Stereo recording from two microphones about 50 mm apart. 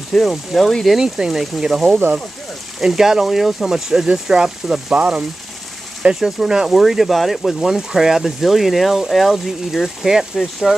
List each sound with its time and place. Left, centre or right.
0.1 s speech: centre
1.0 s speech: centre
4.9 s speech: right
6.1 s speech: centre